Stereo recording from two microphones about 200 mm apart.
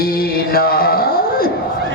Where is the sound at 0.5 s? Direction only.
50° left (ahead or behind).